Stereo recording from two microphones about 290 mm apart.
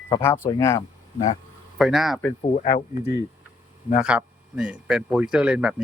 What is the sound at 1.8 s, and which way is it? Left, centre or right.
Speech, centre.